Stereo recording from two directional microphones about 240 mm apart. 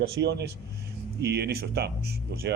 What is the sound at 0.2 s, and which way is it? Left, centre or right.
Speech, right.